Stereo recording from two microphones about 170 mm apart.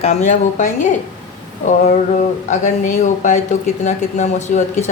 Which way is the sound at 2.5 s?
45° left (ahead or behind).